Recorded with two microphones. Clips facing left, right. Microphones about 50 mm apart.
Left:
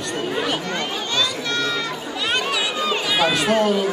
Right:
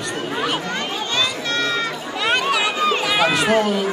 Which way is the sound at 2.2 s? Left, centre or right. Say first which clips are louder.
Right 4 dB; right.